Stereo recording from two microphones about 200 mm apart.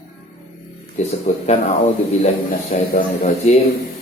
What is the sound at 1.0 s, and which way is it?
Speech, 35° left (ahead or behind).